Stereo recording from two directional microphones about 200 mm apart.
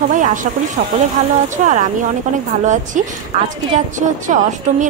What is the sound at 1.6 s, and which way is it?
Speech, 40° right (ahead or behind).